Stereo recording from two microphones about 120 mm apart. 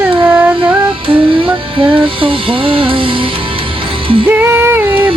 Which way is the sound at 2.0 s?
45° right (ahead or behind).